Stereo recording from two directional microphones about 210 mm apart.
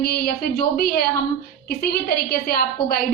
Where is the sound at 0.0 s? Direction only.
45° left (ahead or behind).